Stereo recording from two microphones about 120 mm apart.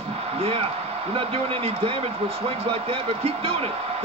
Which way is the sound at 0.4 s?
55° right (ahead or behind).